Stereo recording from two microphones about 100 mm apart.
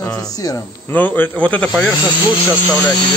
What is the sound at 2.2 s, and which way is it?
Speech, 50° left (ahead or behind).